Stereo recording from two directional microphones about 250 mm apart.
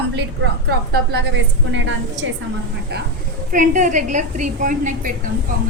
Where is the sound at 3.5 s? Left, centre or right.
Right.